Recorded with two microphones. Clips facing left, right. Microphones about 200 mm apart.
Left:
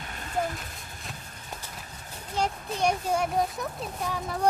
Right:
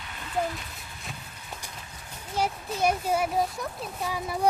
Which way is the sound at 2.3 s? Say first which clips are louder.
Even; 5° right (ahead or behind).